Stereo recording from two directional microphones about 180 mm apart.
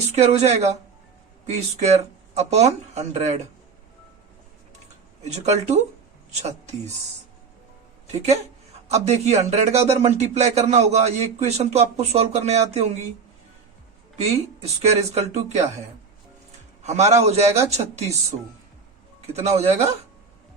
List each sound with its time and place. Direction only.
0.2 s speech: 35° right (ahead or behind)
5.2 s speech: 35° right (ahead or behind)
8.9 s speech: 35° right (ahead or behind)
14.2 s speech: 35° right (ahead or behind)
16.8 s speech: 40° right (ahead or behind)
19.3 s speech: 35° right (ahead or behind)